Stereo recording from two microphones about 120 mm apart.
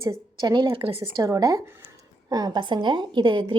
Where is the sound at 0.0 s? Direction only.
25° right (ahead or behind).